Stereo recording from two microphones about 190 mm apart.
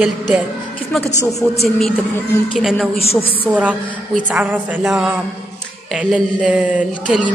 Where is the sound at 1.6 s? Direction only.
Centre (ahead or behind).